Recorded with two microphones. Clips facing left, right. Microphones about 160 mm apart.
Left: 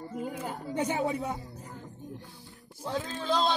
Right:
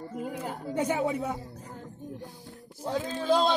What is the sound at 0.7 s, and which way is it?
Speech, 5° right (ahead or behind).